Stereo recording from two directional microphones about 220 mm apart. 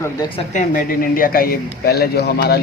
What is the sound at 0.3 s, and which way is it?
Speech, 35° left (ahead or behind).